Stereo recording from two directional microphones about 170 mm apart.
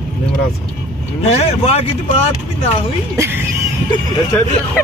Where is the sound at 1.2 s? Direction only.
35° left (ahead or behind).